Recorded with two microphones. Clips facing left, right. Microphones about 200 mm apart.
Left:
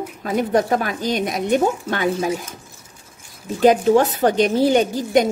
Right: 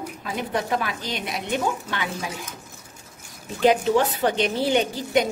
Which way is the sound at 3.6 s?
45° left (ahead or behind).